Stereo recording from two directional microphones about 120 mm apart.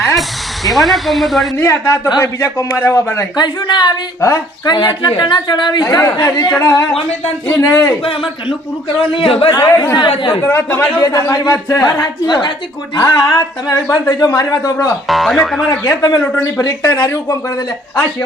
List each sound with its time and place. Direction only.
0.0 s speech: centre (ahead or behind)
1.5 s speech: 20° left (ahead or behind)
3.3 s speech: 35° left (ahead or behind)
9.0 s a man's voice: 50° left (ahead or behind)
9.5 s speech: 25° left (ahead or behind)
10.2 s a man's voice: 40° left (ahead or behind)
10.4 s a man's voice: 20° left (ahead or behind); by 13.0 s 40° left (ahead or behind)
13.7 s speech: 25° left (ahead or behind)
15.0 s speech: centre (ahead or behind)
15.7 s speech: 20° left (ahead or behind)
16.2 s a man's voice: 15° left (ahead or behind)
16.6 s speech: 30° left (ahead or behind)